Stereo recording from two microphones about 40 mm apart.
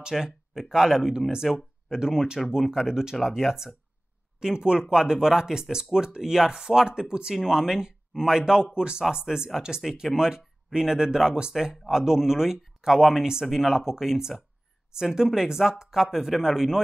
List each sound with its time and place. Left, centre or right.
0.2 s speech: centre